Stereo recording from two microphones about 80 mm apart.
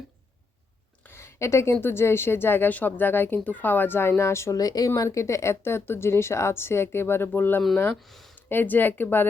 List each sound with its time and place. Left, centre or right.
1.0 s a woman's voice: left
4.5 s speech: left
5.0 s speech: left
8.0 s speech: centre
8.4 s a woman's voice: left